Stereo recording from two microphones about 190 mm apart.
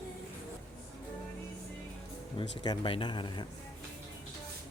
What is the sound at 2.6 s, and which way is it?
Speech, 25° left (ahead or behind).